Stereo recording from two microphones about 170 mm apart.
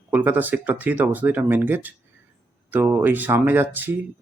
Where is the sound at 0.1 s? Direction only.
10° right (ahead or behind).